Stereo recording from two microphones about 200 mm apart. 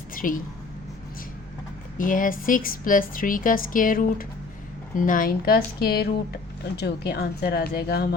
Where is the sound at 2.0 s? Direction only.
40° left (ahead or behind).